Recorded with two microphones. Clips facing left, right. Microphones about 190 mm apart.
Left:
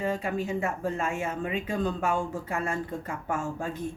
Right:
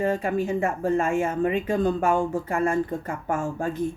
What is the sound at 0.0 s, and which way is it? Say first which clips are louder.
Speech: right 5 dB; 50° right (ahead or behind).